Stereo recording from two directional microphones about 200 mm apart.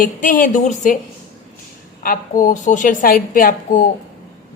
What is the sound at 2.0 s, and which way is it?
A woman's voice, 40° left (ahead or behind).